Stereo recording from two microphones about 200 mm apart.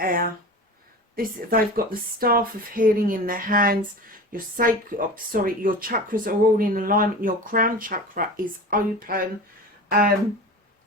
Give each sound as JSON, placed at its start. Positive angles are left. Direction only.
{"t": 0.0, "sound": "speech", "side_deg": -45}